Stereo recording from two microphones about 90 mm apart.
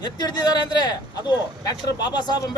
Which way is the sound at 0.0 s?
55° left (ahead or behind).